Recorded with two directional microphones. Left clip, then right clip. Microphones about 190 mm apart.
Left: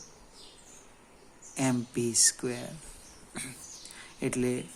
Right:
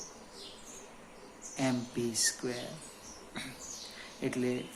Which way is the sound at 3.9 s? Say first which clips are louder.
Left 4 dB; 50° left (ahead or behind).